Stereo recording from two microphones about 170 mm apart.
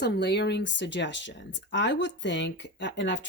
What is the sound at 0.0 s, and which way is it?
Speech, 80° left.